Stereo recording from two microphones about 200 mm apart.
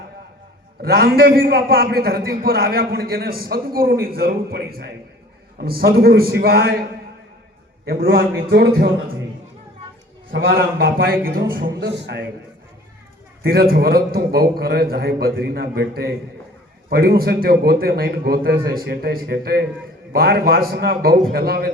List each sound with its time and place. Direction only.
0.8 s a man's voice: 50° right (ahead or behind)
7.9 s a man's voice: 50° right (ahead or behind)
10.3 s a man's voice: 50° right (ahead or behind)
11.8 s a man's voice: 60° right (ahead or behind)
13.4 s a man's voice: 50° right (ahead or behind)
16.9 s a man's voice: 50° right (ahead or behind)